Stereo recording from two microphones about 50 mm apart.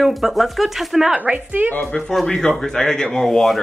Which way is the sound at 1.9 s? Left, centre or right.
Centre.